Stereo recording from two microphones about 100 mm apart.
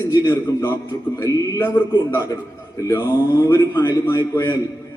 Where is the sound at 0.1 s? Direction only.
35° left (ahead or behind).